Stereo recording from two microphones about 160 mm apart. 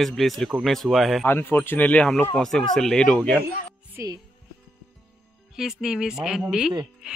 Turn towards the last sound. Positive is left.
turn(degrees=-5)  # may be behind; listen again after turning